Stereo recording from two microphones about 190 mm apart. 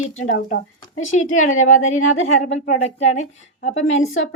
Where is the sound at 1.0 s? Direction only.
90° left.